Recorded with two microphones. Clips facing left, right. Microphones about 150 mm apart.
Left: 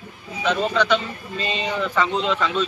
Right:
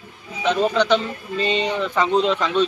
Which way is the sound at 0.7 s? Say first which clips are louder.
Right 2 dB; 35° right (ahead or behind).